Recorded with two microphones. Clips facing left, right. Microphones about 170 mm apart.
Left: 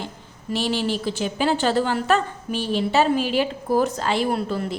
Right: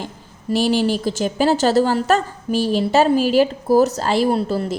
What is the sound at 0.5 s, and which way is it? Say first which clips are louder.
A woman's voice: right 6 dB; 45° right (ahead or behind).